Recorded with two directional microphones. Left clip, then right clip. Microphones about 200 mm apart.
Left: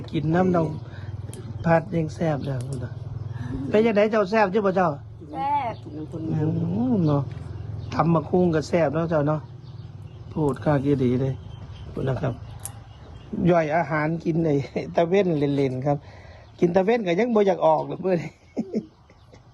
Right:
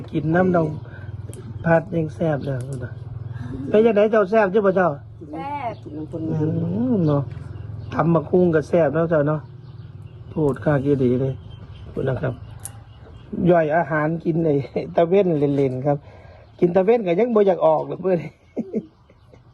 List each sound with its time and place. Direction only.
0.0 s speech: centre (ahead or behind)
13.4 s speech: centre (ahead or behind)